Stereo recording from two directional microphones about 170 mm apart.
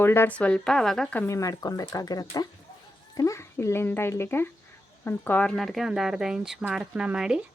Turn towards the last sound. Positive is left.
turn(degrees=-5)  # may be behind; listen again after turning